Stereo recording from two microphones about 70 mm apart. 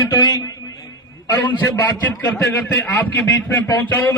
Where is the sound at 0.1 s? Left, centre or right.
Left.